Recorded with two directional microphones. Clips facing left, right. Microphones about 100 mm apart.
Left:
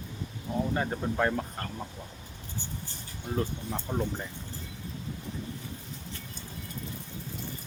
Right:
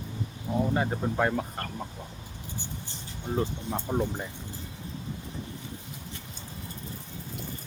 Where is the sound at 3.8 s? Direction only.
15° right (ahead or behind).